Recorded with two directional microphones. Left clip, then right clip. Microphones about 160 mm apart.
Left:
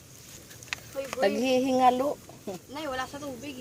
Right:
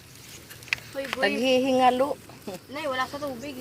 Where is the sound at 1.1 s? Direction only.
90° left.